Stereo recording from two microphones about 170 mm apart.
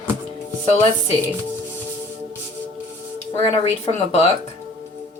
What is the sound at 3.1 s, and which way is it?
A woman's voice, 35° left (ahead or behind).